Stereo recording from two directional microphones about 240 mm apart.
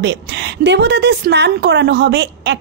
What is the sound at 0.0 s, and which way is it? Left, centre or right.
A woman's voice, right.